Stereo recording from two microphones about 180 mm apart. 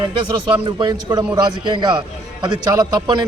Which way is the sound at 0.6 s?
25° right (ahead or behind).